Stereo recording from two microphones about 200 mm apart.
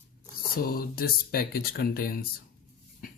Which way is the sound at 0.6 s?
45° left (ahead or behind).